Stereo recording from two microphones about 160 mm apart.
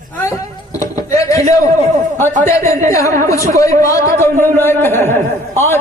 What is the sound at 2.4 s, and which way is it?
Speech, 20° left (ahead or behind).